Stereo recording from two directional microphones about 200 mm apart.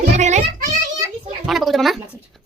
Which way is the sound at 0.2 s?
35° right (ahead or behind).